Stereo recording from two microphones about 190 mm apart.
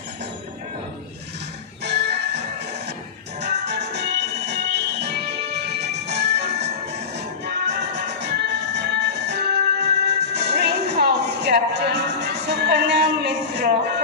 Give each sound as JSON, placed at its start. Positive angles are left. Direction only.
{"t": 1.9, "sound": "music", "side_deg": -65}
{"t": 3.6, "sound": "music", "side_deg": -65}
{"t": 7.4, "sound": "music", "side_deg": -65}